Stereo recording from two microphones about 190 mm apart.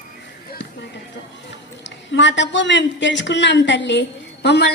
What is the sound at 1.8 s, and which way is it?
A woman's voice, 70° left (ahead or behind).